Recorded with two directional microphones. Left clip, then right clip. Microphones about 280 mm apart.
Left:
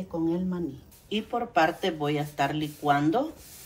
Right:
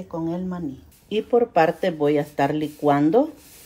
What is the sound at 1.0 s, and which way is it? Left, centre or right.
Speech, right.